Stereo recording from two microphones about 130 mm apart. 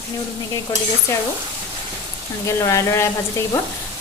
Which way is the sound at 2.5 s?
25° left (ahead or behind).